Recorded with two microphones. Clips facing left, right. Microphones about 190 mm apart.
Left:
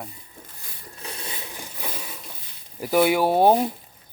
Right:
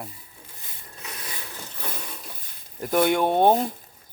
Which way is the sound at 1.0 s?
30° left (ahead or behind).